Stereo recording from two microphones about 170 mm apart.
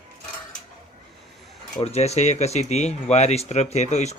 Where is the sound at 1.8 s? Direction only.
40° left (ahead or behind).